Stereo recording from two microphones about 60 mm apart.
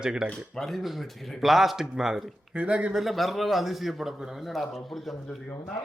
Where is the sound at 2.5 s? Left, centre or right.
Centre.